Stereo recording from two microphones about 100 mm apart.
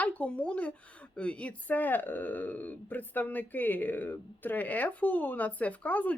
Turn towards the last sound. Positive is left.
turn(degrees=15)  # may be behind; listen again after turning